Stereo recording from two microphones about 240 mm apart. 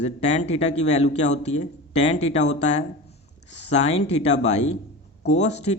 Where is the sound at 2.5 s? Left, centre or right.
Left.